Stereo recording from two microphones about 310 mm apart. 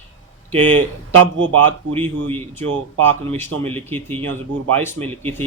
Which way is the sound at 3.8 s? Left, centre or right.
Centre.